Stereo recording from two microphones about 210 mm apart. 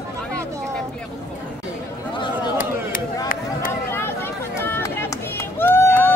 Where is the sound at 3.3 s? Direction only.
40° left (ahead or behind).